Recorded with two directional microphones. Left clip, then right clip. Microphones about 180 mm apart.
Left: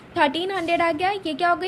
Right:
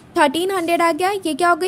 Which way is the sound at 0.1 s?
45° right (ahead or behind).